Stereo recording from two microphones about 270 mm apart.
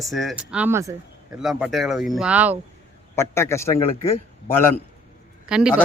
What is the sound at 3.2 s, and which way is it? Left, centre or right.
A man's voice, centre.